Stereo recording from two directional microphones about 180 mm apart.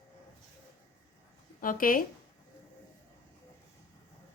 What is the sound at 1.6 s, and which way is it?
Speech, 50° left (ahead or behind).